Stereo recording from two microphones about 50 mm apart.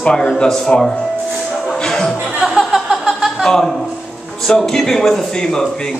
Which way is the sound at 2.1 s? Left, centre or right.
Centre.